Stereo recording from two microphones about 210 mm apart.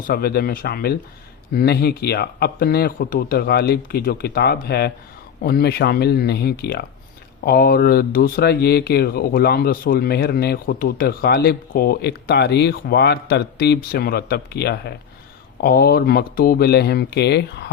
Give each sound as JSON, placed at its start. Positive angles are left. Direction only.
{"t": 0.1, "sound": "speech", "side_deg": 45}